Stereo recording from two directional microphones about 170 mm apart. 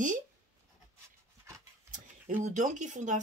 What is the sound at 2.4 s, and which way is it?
Speech, 45° right (ahead or behind).